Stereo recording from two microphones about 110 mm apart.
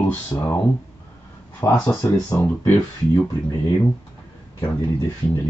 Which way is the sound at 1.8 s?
30° left (ahead or behind).